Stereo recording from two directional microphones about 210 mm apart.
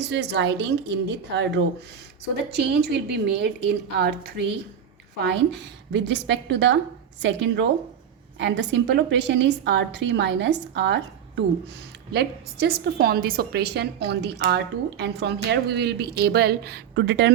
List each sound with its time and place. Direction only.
0.0 s a woman's voice: 55° right (ahead or behind)
12.1 s a woman's voice: 50° right (ahead or behind)